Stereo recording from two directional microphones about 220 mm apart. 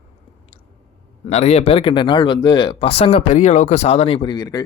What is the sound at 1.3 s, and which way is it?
Speech, 30° left (ahead or behind).